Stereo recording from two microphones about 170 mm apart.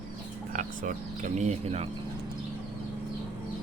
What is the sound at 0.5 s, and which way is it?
Speech, 50° right (ahead or behind).